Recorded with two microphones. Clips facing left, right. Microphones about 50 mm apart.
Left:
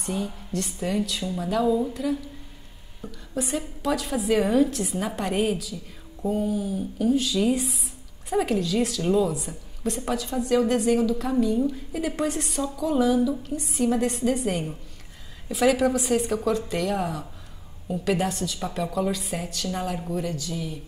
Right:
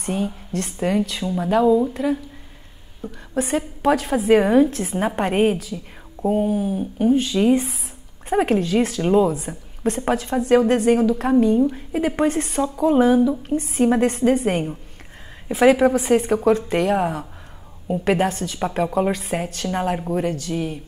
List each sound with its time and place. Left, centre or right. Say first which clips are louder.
0.0 s a woman's voice: right 5 dB; right